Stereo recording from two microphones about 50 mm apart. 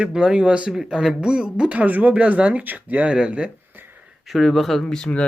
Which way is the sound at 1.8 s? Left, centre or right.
Right.